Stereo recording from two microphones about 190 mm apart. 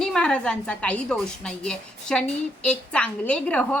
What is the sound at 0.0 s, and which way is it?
A woman's voice, 5° left (ahead or behind).